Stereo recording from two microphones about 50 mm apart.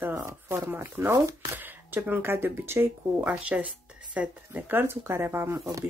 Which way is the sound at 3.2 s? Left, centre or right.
Right.